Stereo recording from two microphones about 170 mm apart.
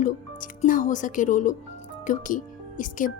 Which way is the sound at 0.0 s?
50° left (ahead or behind).